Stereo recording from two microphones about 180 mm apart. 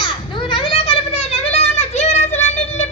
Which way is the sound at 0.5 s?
30° left (ahead or behind).